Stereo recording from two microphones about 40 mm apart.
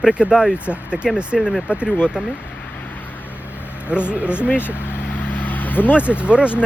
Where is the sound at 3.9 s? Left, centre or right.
Right.